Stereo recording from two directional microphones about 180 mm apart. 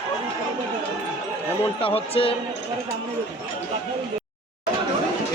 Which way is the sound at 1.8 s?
30° left (ahead or behind).